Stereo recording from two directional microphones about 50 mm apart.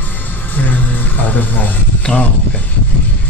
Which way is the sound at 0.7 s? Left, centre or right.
Left.